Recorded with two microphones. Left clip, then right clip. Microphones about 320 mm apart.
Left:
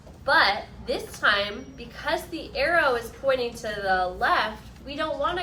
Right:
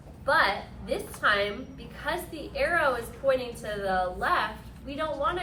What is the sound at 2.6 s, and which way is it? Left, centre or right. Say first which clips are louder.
A woman's voice: left 3 dB; left.